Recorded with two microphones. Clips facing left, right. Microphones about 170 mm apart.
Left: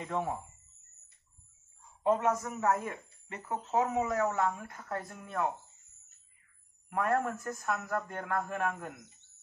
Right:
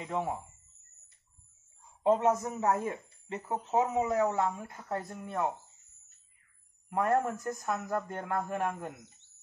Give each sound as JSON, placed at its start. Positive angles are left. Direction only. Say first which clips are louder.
{"t": 0.0, "sound": "speech", "louder": "right 1 dB", "side_deg": -15}
{"t": 2.0, "sound": "speech", "louder": "right 2 dB", "side_deg": -20}
{"t": 6.9, "sound": "speech", "louder": "right 2 dB", "side_deg": -25}